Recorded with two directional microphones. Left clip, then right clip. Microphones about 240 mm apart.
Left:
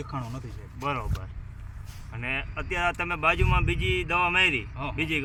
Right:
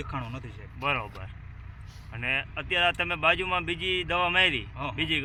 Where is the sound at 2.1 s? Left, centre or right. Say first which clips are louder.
Right 2 dB; centre.